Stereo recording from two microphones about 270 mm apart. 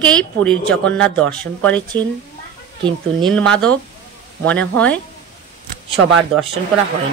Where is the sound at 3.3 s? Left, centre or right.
Centre.